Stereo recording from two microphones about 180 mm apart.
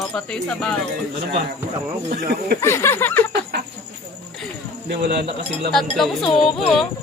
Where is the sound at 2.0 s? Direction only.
55° right (ahead or behind).